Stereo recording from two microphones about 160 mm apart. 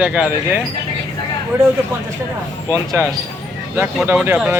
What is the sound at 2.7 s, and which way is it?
Speech, 15° right (ahead or behind).